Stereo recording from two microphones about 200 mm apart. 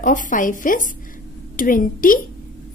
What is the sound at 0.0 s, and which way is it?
A woman's voice, 40° left (ahead or behind).